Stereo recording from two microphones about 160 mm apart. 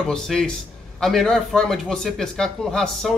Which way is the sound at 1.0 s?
Centre (ahead or behind).